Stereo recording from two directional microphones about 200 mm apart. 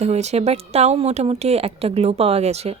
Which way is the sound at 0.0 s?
35° right (ahead or behind).